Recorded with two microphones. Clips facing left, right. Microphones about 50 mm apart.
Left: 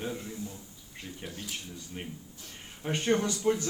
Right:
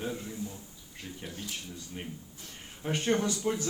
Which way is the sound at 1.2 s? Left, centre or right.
Centre.